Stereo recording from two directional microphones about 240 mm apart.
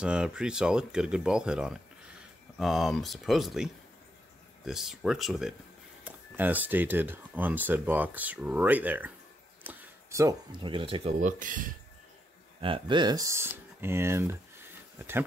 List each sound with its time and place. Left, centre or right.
0.0 s speech: centre; by 11.1 s right
11.2 s speech: right
12.5 s speech: right